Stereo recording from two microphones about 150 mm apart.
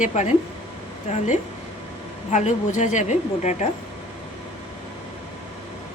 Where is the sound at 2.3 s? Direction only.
55° left (ahead or behind).